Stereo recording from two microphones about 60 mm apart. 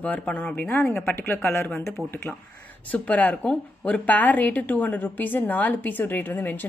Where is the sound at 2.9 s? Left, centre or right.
Left.